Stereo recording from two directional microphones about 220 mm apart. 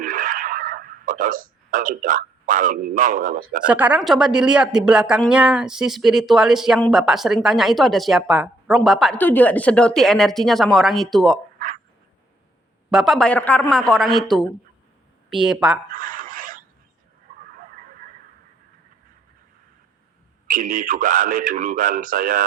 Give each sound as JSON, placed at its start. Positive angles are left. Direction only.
{"t": 0.0, "sound": "a sound", "side_deg": -40}
{"t": 3.7, "sound": "speech", "side_deg": -5}
{"t": 12.9, "sound": "speech", "side_deg": 0}
{"t": 15.9, "sound": "filing", "side_deg": -40}
{"t": 17.5, "sound": "a sound", "side_deg": -40}
{"t": 20.5, "sound": "speech", "side_deg": -40}